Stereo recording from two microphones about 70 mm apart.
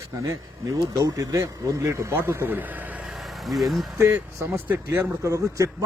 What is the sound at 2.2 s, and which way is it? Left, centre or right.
Speech, right.